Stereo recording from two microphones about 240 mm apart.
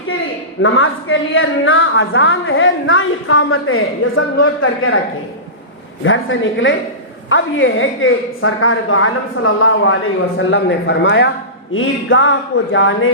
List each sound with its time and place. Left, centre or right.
0.6 s a woman's voice: left
6.1 s a woman's voice: left